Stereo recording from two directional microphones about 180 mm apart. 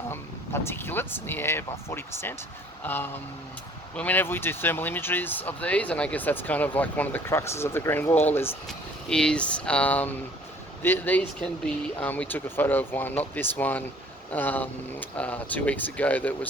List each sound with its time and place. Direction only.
0.1 s speech: 10° left (ahead or behind)